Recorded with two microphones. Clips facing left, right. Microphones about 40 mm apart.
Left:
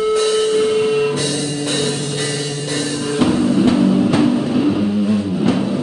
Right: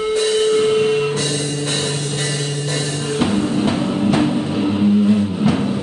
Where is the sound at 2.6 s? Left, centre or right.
Right.